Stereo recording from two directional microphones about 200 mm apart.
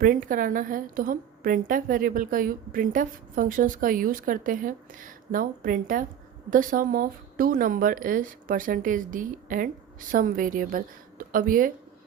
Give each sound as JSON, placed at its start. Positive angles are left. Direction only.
{"t": 0.0, "sound": "a woman's voice", "side_deg": -45}